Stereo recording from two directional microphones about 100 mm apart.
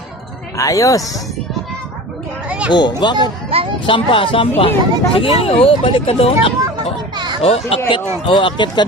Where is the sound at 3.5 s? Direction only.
70° right (ahead or behind).